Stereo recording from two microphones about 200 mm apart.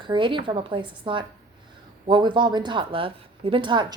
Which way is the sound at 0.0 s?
25° right (ahead or behind).